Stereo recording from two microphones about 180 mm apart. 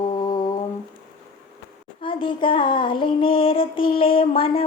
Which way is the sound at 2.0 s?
30° left (ahead or behind).